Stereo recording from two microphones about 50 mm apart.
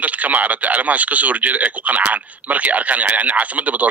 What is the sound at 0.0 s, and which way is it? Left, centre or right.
Speech, right.